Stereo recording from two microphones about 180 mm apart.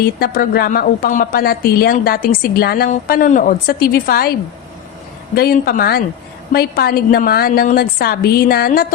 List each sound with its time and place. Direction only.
0.0 s a woman's voice: 55° left (ahead or behind)